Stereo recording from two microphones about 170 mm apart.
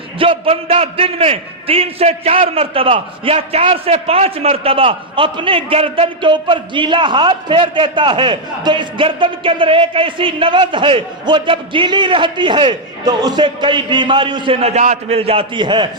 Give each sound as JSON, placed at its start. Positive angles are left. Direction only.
{"t": 0.2, "sound": "a man's voice", "side_deg": -35}